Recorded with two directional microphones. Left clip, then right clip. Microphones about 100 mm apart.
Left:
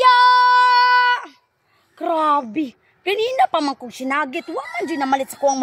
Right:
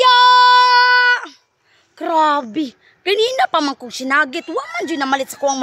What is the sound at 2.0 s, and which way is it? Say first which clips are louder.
A woman's voice: right 3 dB; 40° right (ahead or behind).